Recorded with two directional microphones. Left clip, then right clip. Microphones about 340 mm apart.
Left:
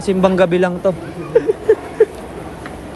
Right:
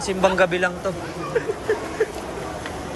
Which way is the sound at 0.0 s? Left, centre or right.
Centre.